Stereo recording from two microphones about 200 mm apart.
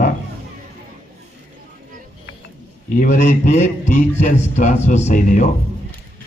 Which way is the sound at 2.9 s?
40° left (ahead or behind).